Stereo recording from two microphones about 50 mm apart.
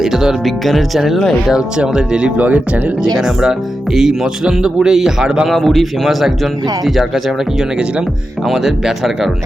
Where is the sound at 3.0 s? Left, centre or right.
Centre.